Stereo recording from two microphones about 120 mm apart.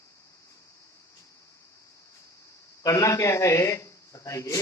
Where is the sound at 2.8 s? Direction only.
25° left (ahead or behind).